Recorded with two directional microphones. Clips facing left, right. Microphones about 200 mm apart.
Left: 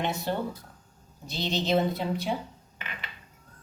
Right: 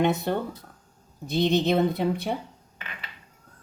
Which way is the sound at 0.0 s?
55° right (ahead or behind).